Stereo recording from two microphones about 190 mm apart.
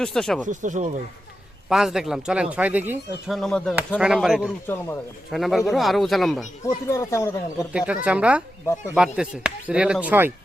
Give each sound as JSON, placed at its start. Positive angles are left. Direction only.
{"t": 0.0, "sound": "speech", "side_deg": 0}
{"t": 0.4, "sound": "speech", "side_deg": -40}
{"t": 1.7, "sound": "speech", "side_deg": 0}
{"t": 3.3, "sound": "speech", "side_deg": 0}
{"t": 4.6, "sound": "speech", "side_deg": 10}
{"t": 5.3, "sound": "speech", "side_deg": 0}
{"t": 6.7, "sound": "speech", "side_deg": 15}
{"t": 7.7, "sound": "speech", "side_deg": -5}